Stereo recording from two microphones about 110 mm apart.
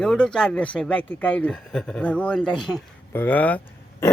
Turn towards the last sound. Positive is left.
turn(degrees=15)  # may be behind; listen again after turning